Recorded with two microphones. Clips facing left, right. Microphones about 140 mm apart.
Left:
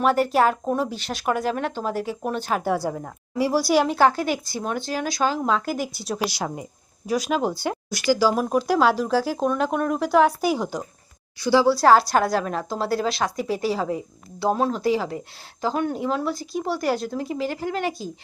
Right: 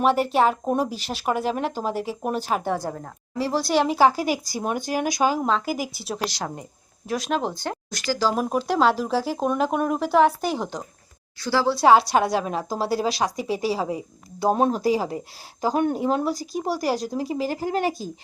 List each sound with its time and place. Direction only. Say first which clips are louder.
0.0 s speech: even; centre (ahead or behind)
5.5 s a woman's voice: even; centre (ahead or behind)
11.7 s speech: right 3 dB; centre (ahead or behind)
12.9 s speech: even; 35° right (ahead or behind)
13.6 s speech: even; 5° right (ahead or behind)
14.7 s speech: right 1 dB; 40° right (ahead or behind)
15.6 s speech: right 2 dB; 15° right (ahead or behind)
15.9 s speech: right 2 dB; 45° right (ahead or behind)